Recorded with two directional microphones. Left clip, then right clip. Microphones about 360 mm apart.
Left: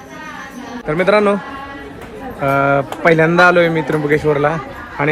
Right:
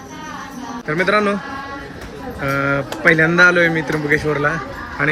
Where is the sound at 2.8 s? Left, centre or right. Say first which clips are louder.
Left 2 dB; left.